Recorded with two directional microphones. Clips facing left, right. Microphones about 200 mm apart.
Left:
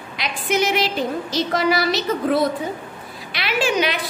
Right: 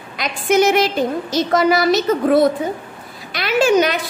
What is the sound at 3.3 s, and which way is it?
Speech, 45° right (ahead or behind).